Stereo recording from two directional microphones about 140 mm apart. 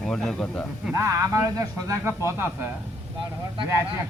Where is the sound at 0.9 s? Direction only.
20° right (ahead or behind).